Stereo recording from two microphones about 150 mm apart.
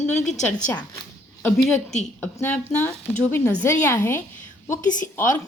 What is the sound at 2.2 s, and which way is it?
Speech, 10° left (ahead or behind).